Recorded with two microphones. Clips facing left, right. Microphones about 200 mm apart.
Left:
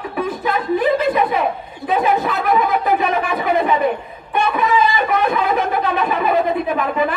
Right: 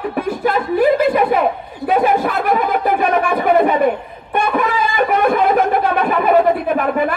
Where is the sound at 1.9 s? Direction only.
50° right (ahead or behind).